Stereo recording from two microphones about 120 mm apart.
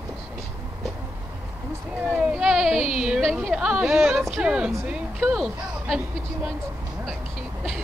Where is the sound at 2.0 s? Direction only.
10° right (ahead or behind).